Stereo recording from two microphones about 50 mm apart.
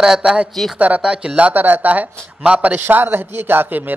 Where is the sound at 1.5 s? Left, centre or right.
Right.